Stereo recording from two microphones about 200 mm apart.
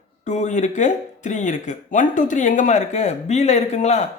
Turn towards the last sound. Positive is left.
turn(degrees=35)  # may be behind; listen again after turning